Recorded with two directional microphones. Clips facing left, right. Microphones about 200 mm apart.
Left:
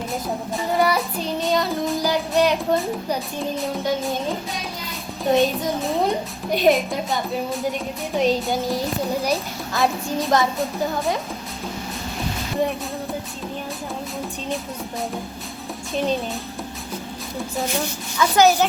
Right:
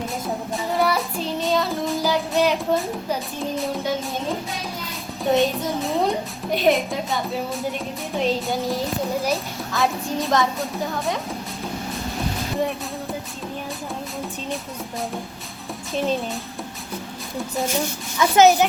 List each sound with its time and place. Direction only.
0.5 s child singing: centre (ahead or behind)
3.6 s a child's voice: centre (ahead or behind)
5.4 s a child's voice: centre (ahead or behind)
16.0 s a child's voice: centre (ahead or behind)
18.2 s speech: 20° right (ahead or behind)